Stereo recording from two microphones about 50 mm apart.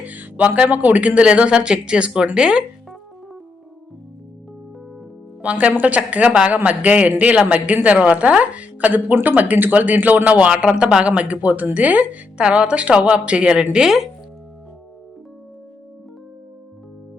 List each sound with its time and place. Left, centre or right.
0.0 s speech: right
5.4 s a woman's voice: right
12.4 s speech: right
13.7 s speech: centre